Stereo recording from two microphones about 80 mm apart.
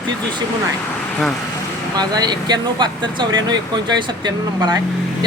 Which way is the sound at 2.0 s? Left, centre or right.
Right.